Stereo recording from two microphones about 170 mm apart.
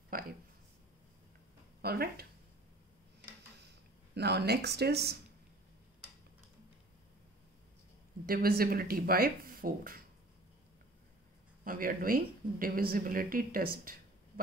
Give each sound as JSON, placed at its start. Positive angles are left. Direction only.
{"t": 1.8, "sound": "speech", "side_deg": -65}
{"t": 3.6, "sound": "speech", "side_deg": -75}
{"t": 8.3, "sound": "speech", "side_deg": -60}
{"t": 11.6, "sound": "speech", "side_deg": -55}